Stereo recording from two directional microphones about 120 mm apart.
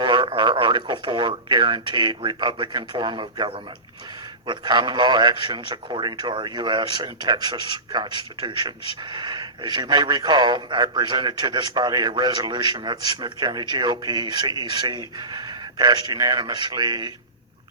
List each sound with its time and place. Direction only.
0.0 s a man's voice: 40° right (ahead or behind)